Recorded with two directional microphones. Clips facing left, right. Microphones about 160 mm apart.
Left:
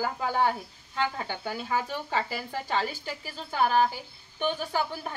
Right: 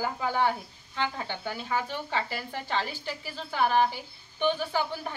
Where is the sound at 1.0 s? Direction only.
40° left (ahead or behind).